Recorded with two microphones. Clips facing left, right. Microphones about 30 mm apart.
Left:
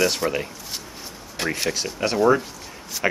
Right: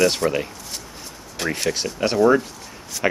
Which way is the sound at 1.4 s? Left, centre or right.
Centre.